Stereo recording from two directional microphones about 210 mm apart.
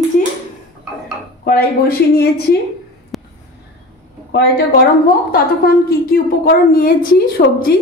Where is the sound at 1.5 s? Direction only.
45° left (ahead or behind).